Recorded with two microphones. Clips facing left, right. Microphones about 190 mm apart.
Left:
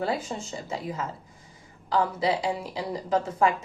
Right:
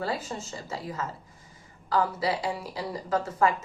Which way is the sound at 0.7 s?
15° left (ahead or behind).